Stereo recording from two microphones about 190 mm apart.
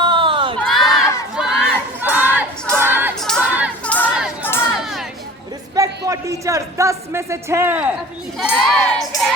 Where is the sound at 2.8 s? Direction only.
10° right (ahead or behind).